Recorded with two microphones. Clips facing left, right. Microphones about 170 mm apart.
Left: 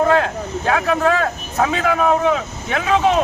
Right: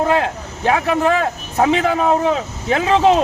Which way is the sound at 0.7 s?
15° right (ahead or behind).